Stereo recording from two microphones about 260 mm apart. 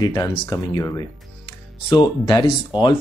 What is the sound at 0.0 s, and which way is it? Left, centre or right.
Speech, centre.